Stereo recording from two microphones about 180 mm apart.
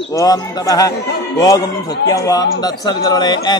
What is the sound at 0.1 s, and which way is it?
Speech, 20° left (ahead or behind).